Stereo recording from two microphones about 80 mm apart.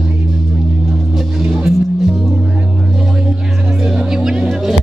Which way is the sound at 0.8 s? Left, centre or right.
Centre.